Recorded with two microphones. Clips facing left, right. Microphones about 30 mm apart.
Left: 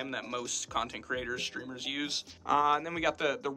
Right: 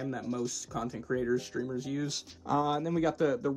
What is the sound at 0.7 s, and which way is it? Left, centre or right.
Speech, left.